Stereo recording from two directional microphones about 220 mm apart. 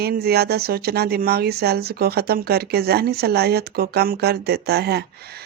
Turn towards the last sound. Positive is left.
turn(degrees=-45)  # may be behind; listen again after turning